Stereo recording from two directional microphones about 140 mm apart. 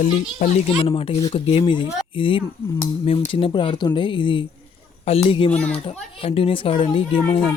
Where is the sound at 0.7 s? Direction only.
45° left (ahead or behind).